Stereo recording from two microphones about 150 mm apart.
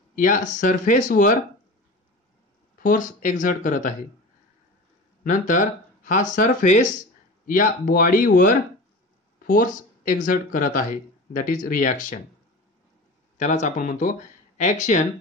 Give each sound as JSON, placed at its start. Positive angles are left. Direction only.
{"t": 0.1, "sound": "speech", "side_deg": 60}
{"t": 2.8, "sound": "speech", "side_deg": 60}
{"t": 5.2, "sound": "speech", "side_deg": 60}
{"t": 13.4, "sound": "speech", "side_deg": 55}